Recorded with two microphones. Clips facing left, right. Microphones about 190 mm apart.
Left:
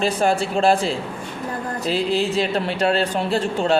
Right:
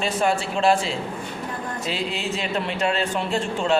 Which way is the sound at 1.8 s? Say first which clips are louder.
Left 8 dB; 35° left (ahead or behind).